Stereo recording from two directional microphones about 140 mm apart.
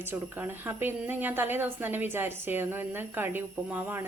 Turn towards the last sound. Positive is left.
turn(degrees=-15)  # may be behind; listen again after turning